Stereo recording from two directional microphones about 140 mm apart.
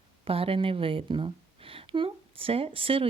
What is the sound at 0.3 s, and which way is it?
Speech, 40° right (ahead or behind).